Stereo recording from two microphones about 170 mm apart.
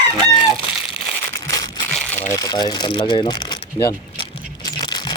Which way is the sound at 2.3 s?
20° left (ahead or behind).